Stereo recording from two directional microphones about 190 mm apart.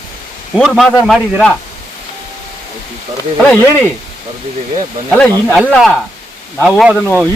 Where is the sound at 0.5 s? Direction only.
Centre (ahead or behind).